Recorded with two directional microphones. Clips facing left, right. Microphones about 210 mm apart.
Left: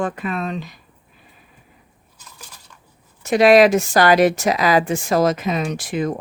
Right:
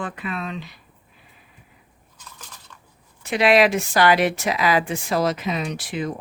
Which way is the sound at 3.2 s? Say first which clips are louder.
Left 5 dB; 45° left (ahead or behind).